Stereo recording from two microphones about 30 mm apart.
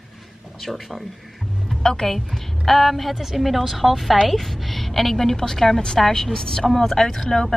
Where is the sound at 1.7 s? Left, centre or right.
Centre.